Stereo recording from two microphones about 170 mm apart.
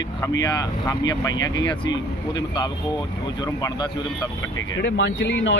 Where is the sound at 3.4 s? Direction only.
25° left (ahead or behind).